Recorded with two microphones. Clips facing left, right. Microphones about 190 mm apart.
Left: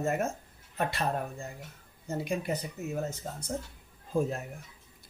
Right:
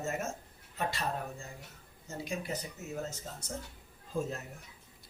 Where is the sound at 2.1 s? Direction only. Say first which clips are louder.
Left 6 dB; 60° left (ahead or behind).